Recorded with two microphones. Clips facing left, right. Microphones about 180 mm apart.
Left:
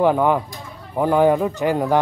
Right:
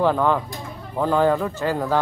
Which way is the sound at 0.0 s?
15° left (ahead or behind).